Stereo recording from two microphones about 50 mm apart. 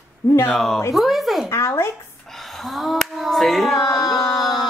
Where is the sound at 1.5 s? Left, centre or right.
Left.